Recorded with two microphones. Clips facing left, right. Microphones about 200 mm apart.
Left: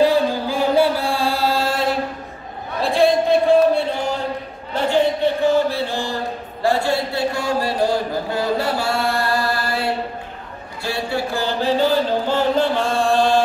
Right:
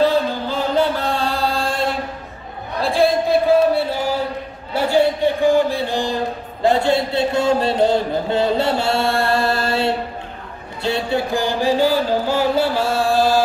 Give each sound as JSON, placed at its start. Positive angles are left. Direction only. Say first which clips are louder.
{"t": 0.0, "sound": "chant", "louder": "left 1 dB", "side_deg": 10}
{"t": 2.8, "sound": "a sound", "louder": "left 1 dB", "side_deg": 0}
{"t": 10.8, "sound": "music", "louder": "right 3 dB", "side_deg": -20}